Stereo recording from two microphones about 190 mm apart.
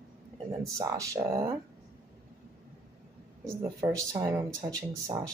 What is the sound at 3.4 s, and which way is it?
Speech, 15° right (ahead or behind).